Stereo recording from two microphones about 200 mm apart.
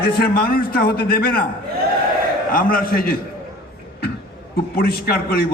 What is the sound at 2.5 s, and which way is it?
Speech, 45° left (ahead or behind).